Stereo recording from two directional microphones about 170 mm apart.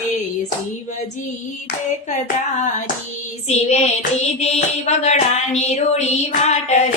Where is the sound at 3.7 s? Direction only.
40° left (ahead or behind).